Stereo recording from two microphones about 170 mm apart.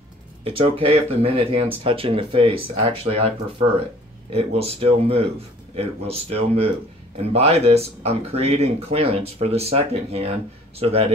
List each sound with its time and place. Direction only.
0.4 s speech: 35° right (ahead or behind)